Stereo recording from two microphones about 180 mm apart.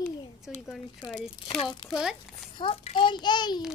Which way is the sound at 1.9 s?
5° right (ahead or behind).